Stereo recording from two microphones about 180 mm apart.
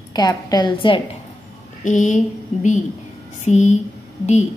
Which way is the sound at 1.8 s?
45° left (ahead or behind).